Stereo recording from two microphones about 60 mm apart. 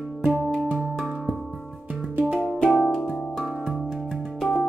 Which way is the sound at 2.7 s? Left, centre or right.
Centre.